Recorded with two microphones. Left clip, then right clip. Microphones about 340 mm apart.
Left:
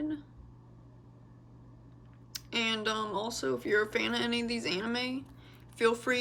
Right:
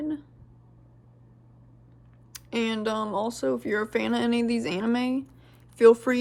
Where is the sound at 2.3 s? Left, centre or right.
Centre.